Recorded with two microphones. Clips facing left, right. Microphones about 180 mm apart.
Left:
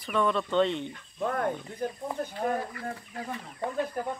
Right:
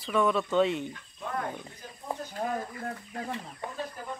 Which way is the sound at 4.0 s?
55° left (ahead or behind).